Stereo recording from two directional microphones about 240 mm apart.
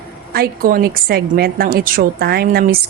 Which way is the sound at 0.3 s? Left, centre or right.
Right.